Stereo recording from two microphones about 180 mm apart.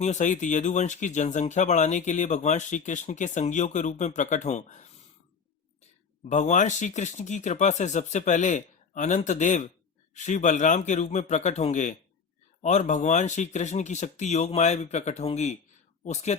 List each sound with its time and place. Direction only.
0.0 s speech: 40° left (ahead or behind)
6.2 s speech: 40° left (ahead or behind)